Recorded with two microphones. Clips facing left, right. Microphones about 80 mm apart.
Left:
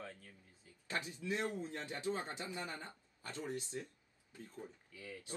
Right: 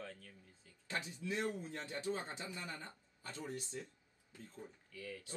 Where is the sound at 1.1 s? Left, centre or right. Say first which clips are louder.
Even; left.